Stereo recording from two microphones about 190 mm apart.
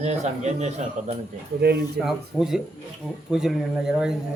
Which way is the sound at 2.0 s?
Centre (ahead or behind).